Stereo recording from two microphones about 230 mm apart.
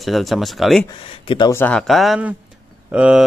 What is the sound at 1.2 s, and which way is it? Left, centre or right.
Speech, centre.